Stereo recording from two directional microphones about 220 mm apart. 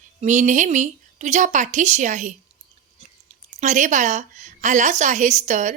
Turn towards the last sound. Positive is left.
turn(degrees=-35)  # may be behind; listen again after turning